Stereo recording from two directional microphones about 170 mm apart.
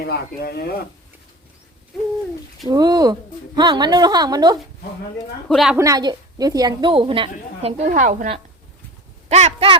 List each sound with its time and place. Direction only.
0.0 s speech: 70° left (ahead or behind)
2.6 s a woman's voice: 25° right (ahead or behind)
5.5 s a woman's voice: 5° right (ahead or behind)
5.7 s a woman's voice: 20° right (ahead or behind)
7.8 s a woman's voice: 50° right (ahead or behind)
9.3 s speech: 35° right (ahead or behind)